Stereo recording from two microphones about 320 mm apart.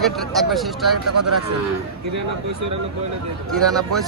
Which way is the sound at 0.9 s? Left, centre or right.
Right.